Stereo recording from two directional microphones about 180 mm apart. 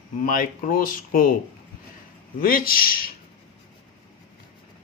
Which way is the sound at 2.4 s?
55° left (ahead or behind).